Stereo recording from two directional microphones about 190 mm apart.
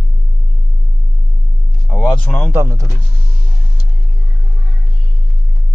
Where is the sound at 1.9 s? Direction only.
5° left (ahead or behind).